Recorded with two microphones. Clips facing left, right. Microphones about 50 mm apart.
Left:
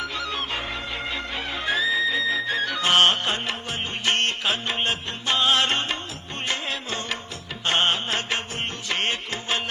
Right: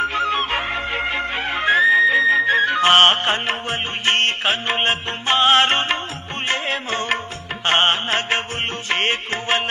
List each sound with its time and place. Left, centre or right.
0.0 s music: right